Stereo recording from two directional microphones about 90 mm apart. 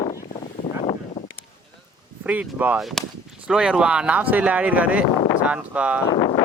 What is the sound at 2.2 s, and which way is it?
Speech, 15° right (ahead or behind).